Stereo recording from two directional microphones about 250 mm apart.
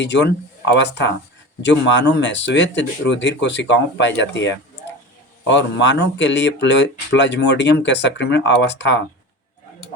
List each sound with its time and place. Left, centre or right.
0.0 s speech: left